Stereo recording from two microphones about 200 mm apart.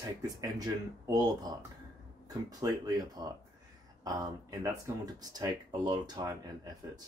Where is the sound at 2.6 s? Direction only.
15° right (ahead or behind).